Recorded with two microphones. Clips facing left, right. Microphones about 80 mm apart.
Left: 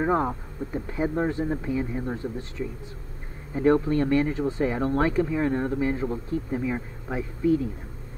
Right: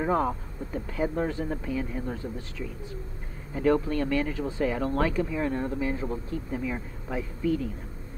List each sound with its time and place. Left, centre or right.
0.0 s speech: left